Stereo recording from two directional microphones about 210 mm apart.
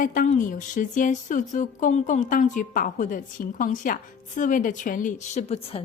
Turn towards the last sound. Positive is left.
turn(degrees=30)  # may be behind; listen again after turning